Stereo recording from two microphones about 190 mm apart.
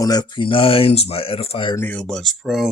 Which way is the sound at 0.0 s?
20° left (ahead or behind).